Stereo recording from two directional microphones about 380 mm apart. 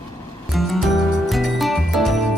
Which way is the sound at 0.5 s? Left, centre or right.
Centre.